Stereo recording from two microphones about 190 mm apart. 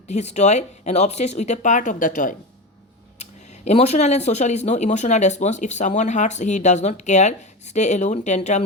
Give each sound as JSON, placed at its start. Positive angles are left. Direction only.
{"t": 0.1, "sound": "speech", "side_deg": 35}